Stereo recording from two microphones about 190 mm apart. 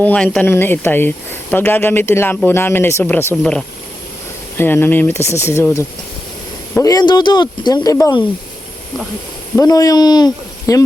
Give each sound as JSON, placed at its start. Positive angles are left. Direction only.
{"t": 0.0, "sound": "speech", "side_deg": 5}
{"t": 4.5, "sound": "speech", "side_deg": 10}
{"t": 9.6, "sound": "speech", "side_deg": 20}